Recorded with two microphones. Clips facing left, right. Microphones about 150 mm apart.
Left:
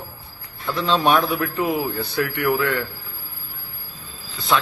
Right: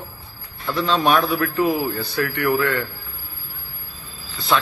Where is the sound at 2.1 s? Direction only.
10° left (ahead or behind).